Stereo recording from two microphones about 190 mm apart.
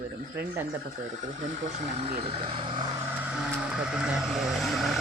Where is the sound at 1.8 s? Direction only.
30° right (ahead or behind).